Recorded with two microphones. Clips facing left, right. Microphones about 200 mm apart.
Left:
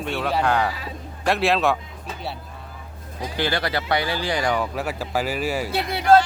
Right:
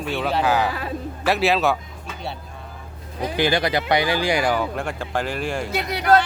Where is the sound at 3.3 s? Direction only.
15° right (ahead or behind); by 5.6 s 5° left (ahead or behind).